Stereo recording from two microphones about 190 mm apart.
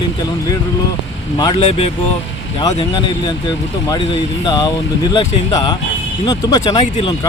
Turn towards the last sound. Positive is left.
turn(degrees=20)  # may be behind; listen again after turning